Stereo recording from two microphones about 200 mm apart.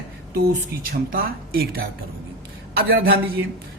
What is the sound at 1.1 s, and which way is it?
Speech, 50° right (ahead or behind).